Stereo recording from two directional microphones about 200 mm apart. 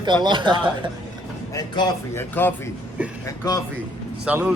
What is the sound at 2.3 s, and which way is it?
Speech, 10° left (ahead or behind).